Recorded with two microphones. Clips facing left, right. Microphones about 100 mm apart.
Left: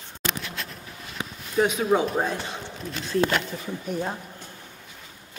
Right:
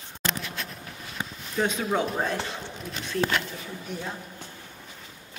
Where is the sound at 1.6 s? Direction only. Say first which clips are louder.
Left 4 dB; 10° left (ahead or behind).